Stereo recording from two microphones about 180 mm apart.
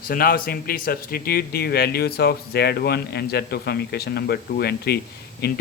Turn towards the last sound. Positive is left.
turn(degrees=65)  # may be behind; listen again after turning